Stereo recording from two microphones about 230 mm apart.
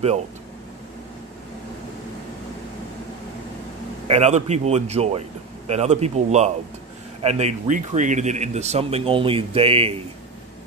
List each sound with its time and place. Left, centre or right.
4.1 s speech: right